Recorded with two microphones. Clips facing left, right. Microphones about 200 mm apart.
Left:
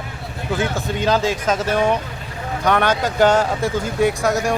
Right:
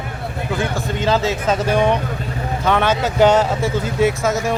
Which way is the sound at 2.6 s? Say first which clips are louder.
Even; 10° left (ahead or behind).